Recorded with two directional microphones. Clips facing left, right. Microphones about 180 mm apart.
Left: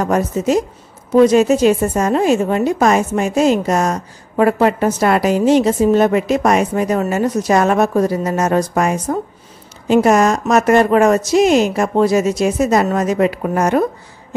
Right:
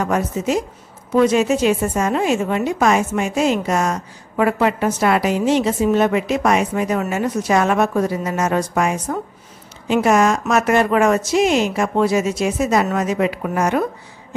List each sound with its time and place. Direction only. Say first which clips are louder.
0.0 s a woman's voice: left 3 dB; 40° left (ahead or behind)